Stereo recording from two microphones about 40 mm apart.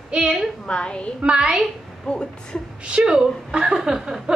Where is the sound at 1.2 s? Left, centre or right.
Right.